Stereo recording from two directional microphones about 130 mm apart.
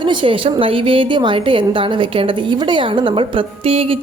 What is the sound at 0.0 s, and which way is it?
A woman's voice, 40° right (ahead or behind).